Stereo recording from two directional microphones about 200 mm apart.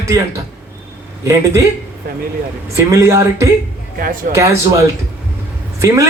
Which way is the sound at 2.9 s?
15° right (ahead or behind).